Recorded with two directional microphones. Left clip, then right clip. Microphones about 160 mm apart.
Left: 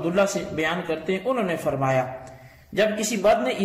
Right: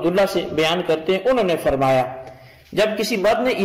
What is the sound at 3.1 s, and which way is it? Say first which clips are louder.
Speech: right 2 dB; 25° right (ahead or behind).